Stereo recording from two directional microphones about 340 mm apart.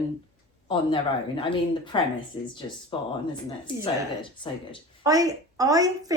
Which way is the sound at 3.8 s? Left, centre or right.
Centre.